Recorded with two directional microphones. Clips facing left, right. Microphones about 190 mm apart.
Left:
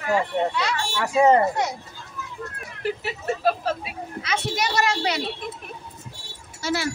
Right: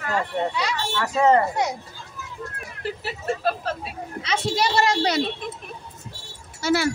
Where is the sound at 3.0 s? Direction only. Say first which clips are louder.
Left 1 dB; 10° left (ahead or behind).